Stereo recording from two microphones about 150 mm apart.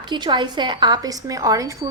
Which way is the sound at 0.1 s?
30° right (ahead or behind).